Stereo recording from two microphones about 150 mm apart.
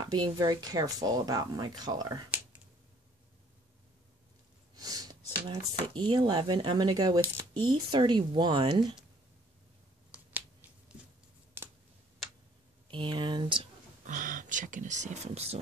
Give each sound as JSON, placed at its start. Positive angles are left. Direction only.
{"t": 0.0, "sound": "speech", "side_deg": -25}
{"t": 4.7, "sound": "speech", "side_deg": -25}
{"t": 10.1, "sound": "finger snapping", "side_deg": -10}
{"t": 11.6, "sound": "a sound", "side_deg": -15}
{"t": 12.9, "sound": "speech", "side_deg": -30}
{"t": 14.0, "sound": "speech", "side_deg": -60}